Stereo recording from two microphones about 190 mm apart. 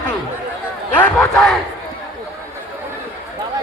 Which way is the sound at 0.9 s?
5° left (ahead or behind).